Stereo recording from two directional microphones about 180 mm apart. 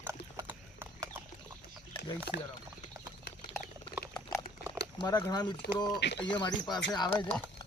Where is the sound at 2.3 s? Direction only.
70° left (ahead or behind).